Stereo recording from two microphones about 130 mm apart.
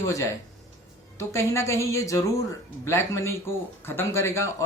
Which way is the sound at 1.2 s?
20° left (ahead or behind).